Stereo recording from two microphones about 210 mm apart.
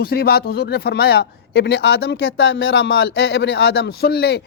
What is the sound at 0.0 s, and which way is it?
A man's voice, 50° left (ahead or behind).